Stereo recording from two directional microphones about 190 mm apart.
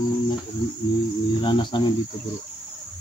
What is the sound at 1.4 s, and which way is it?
Speech, 25° left (ahead or behind).